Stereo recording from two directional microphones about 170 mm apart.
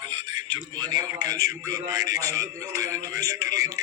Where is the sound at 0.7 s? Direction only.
25° right (ahead or behind).